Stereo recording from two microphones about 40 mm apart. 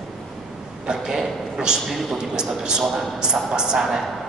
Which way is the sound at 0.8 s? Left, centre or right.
Centre.